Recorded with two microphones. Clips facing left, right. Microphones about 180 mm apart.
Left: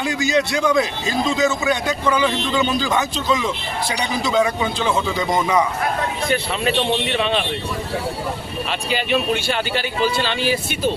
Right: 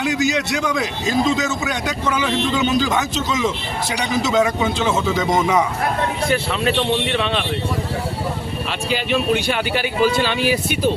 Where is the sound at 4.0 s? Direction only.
20° right (ahead or behind).